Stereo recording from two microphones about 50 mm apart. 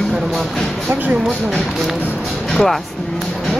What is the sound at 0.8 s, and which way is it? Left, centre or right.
Speech, right.